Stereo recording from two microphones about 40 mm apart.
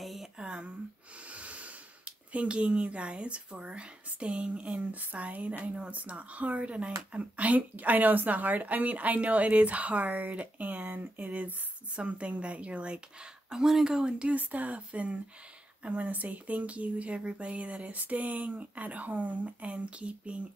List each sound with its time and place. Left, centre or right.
0.0 s a sound: centre
0.4 s a sound: right
1.3 s speech: right
12.0 s speech: right
13.5 s speech: centre
13.8 s speech: centre
14.3 s speech: right
16.1 s speech: right